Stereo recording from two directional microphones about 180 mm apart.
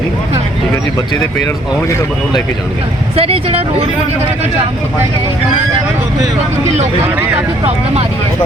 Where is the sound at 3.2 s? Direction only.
35° right (ahead or behind).